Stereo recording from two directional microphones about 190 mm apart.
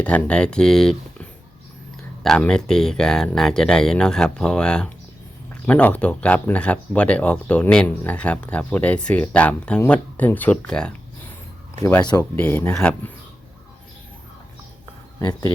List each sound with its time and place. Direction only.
0.0 s speech: 5° left (ahead or behind)
15.3 s speech: 20° left (ahead or behind)